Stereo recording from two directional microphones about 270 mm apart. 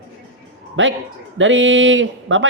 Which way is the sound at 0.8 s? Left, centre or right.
Right.